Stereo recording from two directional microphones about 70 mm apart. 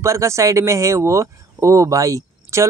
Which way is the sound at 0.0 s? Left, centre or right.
Right.